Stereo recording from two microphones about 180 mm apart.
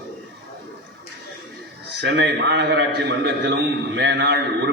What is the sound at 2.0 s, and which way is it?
A man's voice, 65° right (ahead or behind).